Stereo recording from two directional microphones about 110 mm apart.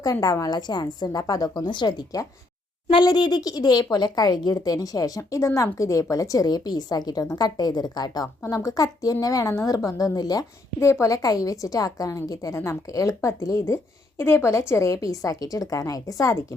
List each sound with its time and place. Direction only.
0.0 s a woman's voice: 35° left (ahead or behind)
10.8 s a woman's voice: 25° left (ahead or behind)